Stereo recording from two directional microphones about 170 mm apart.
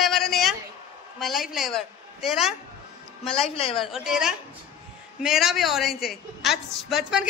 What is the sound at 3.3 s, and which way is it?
Speech, 35° left (ahead or behind).